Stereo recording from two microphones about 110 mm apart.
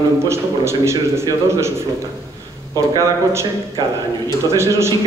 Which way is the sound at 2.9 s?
25° right (ahead or behind).